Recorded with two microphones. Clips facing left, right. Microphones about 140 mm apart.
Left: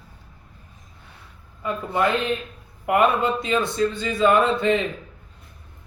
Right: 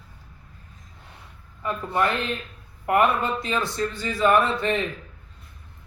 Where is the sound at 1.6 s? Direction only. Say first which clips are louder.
Left 2 dB; 20° left (ahead or behind).